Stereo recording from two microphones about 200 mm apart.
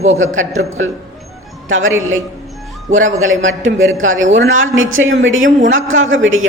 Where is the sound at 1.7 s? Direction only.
75° right (ahead or behind).